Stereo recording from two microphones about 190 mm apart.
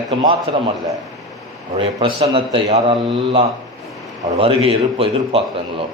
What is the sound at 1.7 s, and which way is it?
A man's voice, 30° right (ahead or behind).